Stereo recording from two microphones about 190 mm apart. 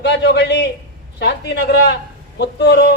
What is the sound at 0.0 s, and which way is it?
A man's voice, 70° left (ahead or behind).